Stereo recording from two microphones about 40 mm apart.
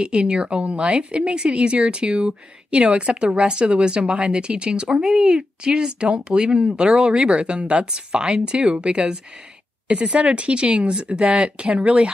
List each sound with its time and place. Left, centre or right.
0.0 s speech: right
3.5 s speech: right
5.0 s speech: centre
5.3 s speech: right
7.2 s speech: right